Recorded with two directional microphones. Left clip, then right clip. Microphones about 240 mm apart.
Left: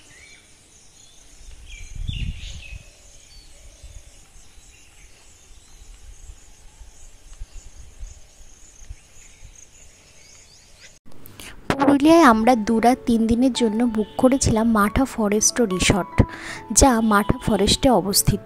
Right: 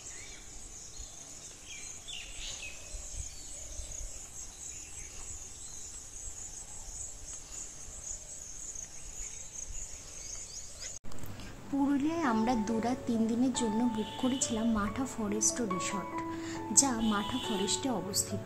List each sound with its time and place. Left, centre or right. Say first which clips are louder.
12.0 s a woman's voice: left 18 dB; left